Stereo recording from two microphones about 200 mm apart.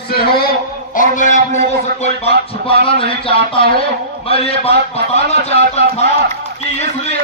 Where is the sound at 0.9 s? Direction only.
40° left (ahead or behind).